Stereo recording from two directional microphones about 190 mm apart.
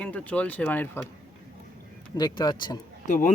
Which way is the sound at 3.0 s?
40° left (ahead or behind).